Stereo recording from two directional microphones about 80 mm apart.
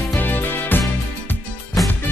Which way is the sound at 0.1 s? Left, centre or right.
Left.